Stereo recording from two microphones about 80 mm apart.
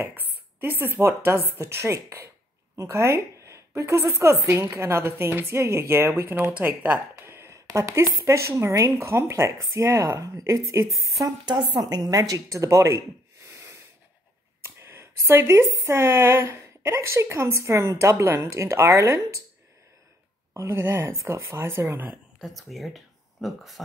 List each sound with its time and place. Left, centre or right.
0.0 s speech: right
6.5 s speech: centre
7.2 s speech: right
11.4 s a woman's voice: right
14.8 s speech: right
20.5 s speech: right
22.4 s speech: centre